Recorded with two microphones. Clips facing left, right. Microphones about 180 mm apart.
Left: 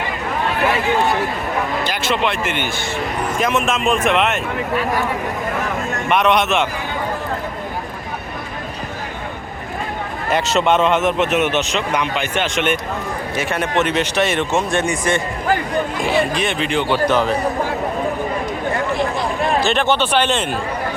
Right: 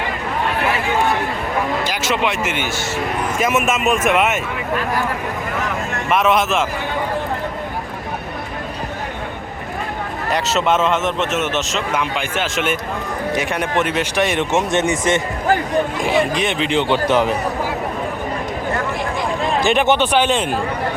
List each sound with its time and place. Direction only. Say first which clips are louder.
1.8 s speech: even; 10° right (ahead or behind)
6.1 s speech: even; centre (ahead or behind)
10.2 s speech: left 2 dB; centre (ahead or behind)
13.3 s speech: left 1 dB; 15° right (ahead or behind)
19.6 s speech: right 2 dB; 15° right (ahead or behind)